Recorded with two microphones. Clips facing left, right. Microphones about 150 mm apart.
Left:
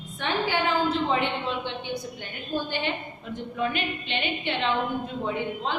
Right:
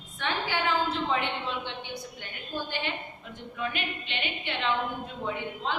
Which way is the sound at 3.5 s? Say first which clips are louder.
Left 5 dB; 30° left (ahead or behind).